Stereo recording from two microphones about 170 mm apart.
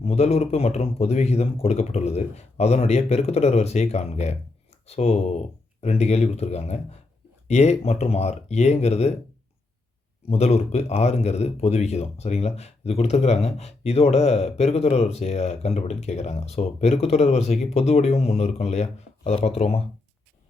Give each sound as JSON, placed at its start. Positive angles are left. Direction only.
{"t": 0.0, "sound": "speech", "side_deg": 40}
{"t": 10.2, "sound": "speech", "side_deg": 40}